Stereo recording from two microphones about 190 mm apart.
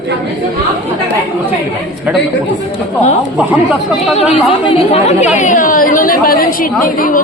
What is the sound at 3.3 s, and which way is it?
Speech, 5° right (ahead or behind).